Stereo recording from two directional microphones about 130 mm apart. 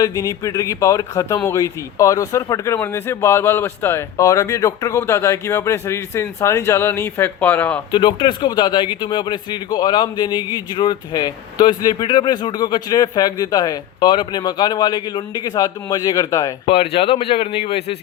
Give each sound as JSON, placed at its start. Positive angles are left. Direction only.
{"t": 0.0, "sound": "speech", "side_deg": 25}
{"t": 7.9, "sound": "speech", "side_deg": 35}
{"t": 16.6, "sound": "speech", "side_deg": 45}